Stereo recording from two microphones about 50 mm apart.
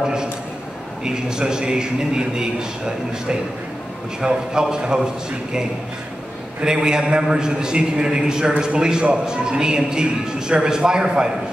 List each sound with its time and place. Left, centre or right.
1.0 s a man's voice: centre
4.2 s a man's voice: centre